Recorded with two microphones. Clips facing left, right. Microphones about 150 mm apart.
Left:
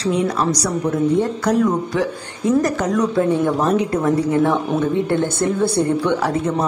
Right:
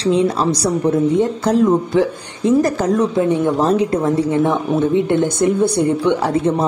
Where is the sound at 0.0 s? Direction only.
25° right (ahead or behind).